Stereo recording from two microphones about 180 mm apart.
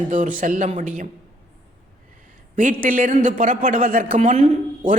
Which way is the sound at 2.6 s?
45° right (ahead or behind).